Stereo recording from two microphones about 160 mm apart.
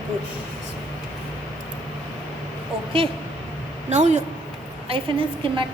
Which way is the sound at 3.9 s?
50° right (ahead or behind).